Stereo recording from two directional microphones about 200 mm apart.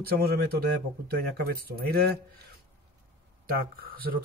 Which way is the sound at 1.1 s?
50° right (ahead or behind).